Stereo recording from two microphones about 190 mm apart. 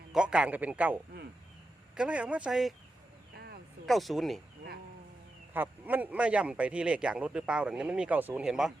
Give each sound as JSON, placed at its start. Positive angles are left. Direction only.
{"t": 0.1, "sound": "a man's voice", "side_deg": -5}
{"t": 2.0, "sound": "speech", "side_deg": -5}
{"t": 3.3, "sound": "a sound", "side_deg": -55}
{"t": 3.8, "sound": "speech", "side_deg": 0}
{"t": 5.5, "sound": "speech", "side_deg": -10}